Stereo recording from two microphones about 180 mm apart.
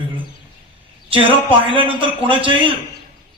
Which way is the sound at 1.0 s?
30° right (ahead or behind).